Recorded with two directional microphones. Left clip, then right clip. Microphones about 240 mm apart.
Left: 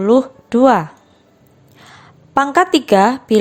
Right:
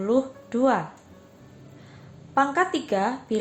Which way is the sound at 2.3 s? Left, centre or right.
Left.